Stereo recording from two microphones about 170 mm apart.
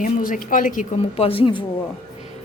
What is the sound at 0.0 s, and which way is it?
Speech, 55° left (ahead or behind).